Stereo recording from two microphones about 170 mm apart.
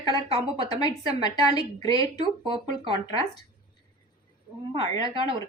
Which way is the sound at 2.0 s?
30° right (ahead or behind).